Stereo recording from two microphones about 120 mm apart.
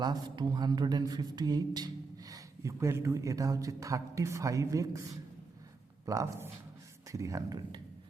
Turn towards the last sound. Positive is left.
turn(degrees=-35)  # may be behind; listen again after turning